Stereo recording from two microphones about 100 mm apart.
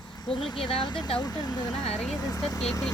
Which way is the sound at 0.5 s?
50° left (ahead or behind).